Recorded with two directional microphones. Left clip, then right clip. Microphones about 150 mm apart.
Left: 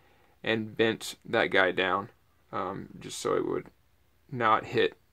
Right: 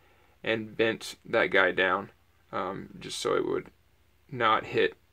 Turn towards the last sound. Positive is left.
turn(degrees=20)  # may be behind; listen again after turning